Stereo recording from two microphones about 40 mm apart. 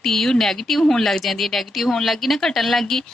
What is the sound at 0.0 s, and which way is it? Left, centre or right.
Speech, centre.